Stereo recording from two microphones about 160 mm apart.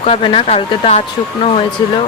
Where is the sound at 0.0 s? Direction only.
35° left (ahead or behind).